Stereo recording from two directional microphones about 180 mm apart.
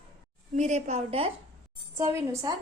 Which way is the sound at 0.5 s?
40° right (ahead or behind).